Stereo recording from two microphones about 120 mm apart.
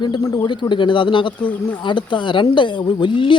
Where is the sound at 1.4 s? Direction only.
10° left (ahead or behind).